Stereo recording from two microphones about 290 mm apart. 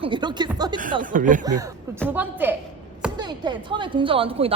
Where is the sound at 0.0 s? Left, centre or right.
Centre.